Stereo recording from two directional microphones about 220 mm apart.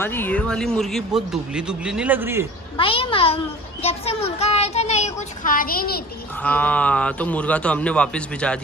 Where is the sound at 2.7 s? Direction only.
25° left (ahead or behind); by 6.1 s 45° left (ahead or behind).